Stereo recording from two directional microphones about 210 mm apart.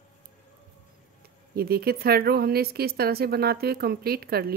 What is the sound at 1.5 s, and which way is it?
A woman's voice, 45° right (ahead or behind).